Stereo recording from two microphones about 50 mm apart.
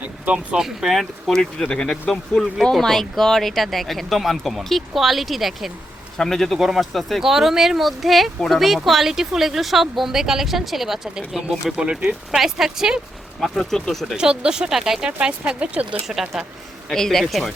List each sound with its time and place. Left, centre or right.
0.3 s speech: centre
1.3 s speech: centre
1.9 s speech: centre
12.0 s speech: centre
13.4 s speech: centre
14.2 s speech: centre
16.2 s speech: centre
16.9 s speech: centre